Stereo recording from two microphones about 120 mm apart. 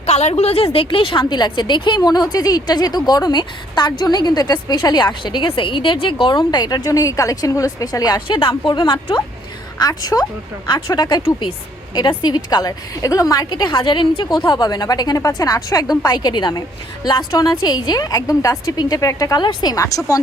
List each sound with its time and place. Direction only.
0.0 s a woman's voice: 65° left (ahead or behind); by 20.1 s 30° left (ahead or behind)